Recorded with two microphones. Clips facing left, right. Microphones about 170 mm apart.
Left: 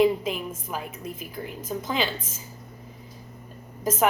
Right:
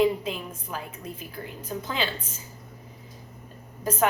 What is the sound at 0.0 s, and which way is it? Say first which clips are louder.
Speech: left 2 dB; 15° left (ahead or behind).